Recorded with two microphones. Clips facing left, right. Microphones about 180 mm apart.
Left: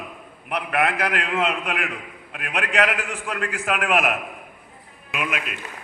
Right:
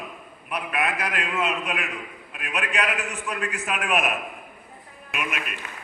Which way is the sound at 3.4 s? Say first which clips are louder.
Left 5 dB; 75° left (ahead or behind).